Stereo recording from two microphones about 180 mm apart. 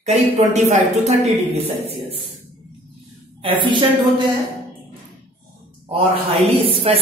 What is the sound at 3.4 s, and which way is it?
Speech, 30° right (ahead or behind).